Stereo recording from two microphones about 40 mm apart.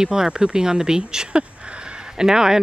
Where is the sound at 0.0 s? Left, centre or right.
Centre.